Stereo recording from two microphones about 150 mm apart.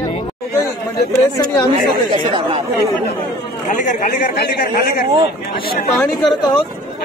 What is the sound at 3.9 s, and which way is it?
Speech, 80° left.